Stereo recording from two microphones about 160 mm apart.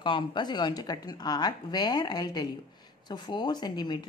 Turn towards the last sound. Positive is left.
turn(degrees=25)  # may be behind; listen again after turning